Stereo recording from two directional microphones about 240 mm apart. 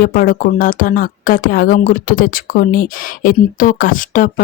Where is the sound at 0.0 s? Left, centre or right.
Left.